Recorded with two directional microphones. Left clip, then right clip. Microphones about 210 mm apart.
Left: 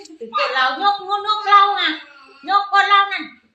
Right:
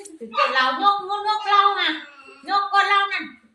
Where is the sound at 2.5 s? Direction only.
20° left (ahead or behind).